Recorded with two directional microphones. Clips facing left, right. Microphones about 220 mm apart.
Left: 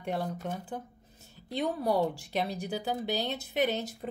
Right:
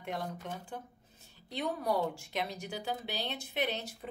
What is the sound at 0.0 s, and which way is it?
Speech, 35° left (ahead or behind).